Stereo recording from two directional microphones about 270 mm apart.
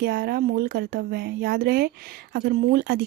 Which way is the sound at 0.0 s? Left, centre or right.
Right.